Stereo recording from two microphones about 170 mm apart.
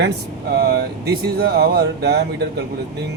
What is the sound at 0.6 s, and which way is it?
A man's voice, 70° right (ahead or behind).